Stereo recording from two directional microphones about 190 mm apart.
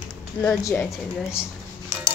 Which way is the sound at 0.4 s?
15° left (ahead or behind).